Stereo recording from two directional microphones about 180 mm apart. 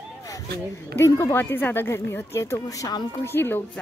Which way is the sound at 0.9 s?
15° left (ahead or behind).